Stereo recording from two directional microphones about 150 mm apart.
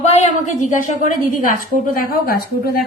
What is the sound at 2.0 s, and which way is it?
Speech, 75° left (ahead or behind).